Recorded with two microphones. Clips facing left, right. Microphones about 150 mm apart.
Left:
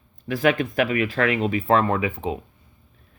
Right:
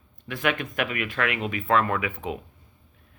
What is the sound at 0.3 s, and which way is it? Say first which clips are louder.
Speech: left 6 dB; 35° left (ahead or behind).